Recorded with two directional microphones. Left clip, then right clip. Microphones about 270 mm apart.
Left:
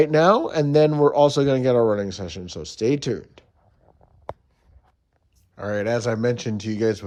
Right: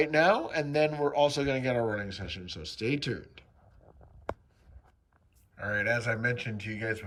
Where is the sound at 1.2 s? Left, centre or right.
Centre.